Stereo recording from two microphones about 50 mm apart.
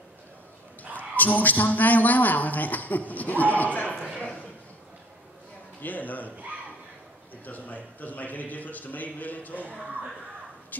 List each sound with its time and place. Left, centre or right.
0.9 s speech: left
4.2 s a sound: left
5.8 s speech: left
7.4 s speech: left